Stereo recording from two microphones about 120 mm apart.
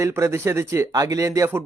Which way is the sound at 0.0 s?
25° right (ahead or behind).